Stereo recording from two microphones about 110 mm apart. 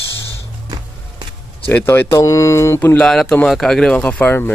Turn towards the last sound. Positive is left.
turn(degrees=15)  # may be behind; listen again after turning